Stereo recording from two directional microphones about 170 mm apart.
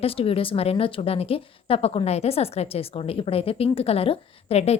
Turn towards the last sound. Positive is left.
turn(degrees=40)  # may be behind; listen again after turning